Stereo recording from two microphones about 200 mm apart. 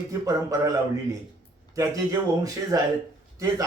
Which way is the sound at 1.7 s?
15° right (ahead or behind).